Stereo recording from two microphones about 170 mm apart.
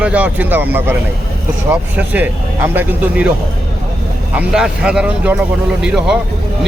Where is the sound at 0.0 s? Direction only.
10° right (ahead or behind).